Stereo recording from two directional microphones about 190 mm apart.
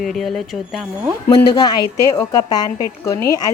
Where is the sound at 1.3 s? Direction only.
20° left (ahead or behind).